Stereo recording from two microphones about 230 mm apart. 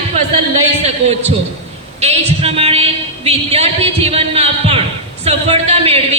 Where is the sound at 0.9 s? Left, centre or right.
Right.